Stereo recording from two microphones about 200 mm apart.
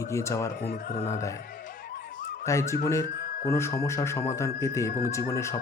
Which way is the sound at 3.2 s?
45° left (ahead or behind).